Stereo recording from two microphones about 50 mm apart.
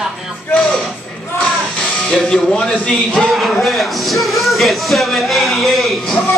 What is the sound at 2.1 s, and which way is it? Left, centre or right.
Speech, centre.